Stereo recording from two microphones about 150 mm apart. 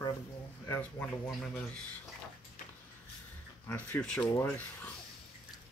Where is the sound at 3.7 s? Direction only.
10° left (ahead or behind).